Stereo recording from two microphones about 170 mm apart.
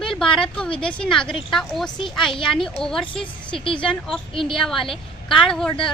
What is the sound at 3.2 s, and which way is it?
Speech, 30° left (ahead or behind).